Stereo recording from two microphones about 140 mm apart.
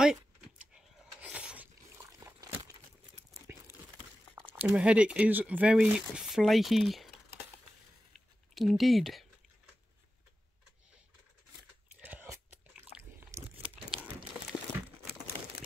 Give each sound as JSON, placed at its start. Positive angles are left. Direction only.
{"t": 0.0, "sound": "a sound", "side_deg": -5}
{"t": 2.0, "sound": "a sound", "side_deg": -25}
{"t": 4.5, "sound": "speech", "side_deg": -10}
{"t": 8.5, "sound": "speech", "side_deg": 0}
{"t": 11.9, "sound": "biting", "side_deg": -10}
{"t": 13.7, "sound": "crumpling", "side_deg": -5}